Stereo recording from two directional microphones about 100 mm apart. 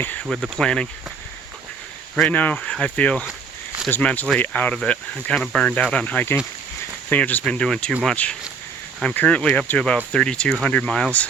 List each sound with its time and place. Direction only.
0.0 s speech: 15° left (ahead or behind)
2.2 s speech: 15° left (ahead or behind)